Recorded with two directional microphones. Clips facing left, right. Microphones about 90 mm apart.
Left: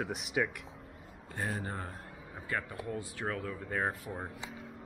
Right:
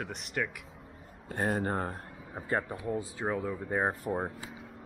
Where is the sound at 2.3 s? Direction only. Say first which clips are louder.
Right 5 dB; 30° right (ahead or behind).